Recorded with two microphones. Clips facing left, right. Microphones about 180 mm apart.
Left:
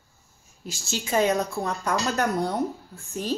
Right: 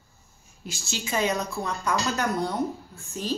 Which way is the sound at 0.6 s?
45° left (ahead or behind).